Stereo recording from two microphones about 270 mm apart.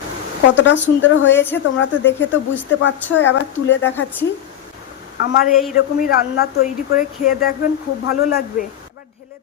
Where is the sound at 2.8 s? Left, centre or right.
Left.